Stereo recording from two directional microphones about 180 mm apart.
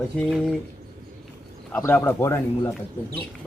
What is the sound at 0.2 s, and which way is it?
Speech, centre (ahead or behind).